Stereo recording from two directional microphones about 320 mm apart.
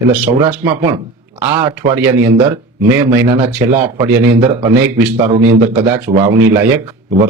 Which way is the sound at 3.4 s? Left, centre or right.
Centre.